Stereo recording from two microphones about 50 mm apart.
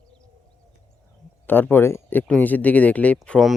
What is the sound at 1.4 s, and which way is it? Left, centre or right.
Speech, left.